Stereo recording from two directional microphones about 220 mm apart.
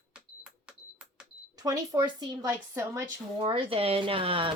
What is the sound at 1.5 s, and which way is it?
A woman's voice, 15° right (ahead or behind).